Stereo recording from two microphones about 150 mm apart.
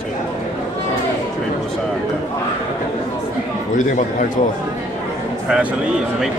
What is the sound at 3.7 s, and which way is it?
Speech, 55° left (ahead or behind).